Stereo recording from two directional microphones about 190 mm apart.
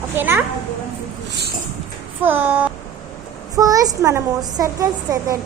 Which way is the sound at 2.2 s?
10° right (ahead or behind).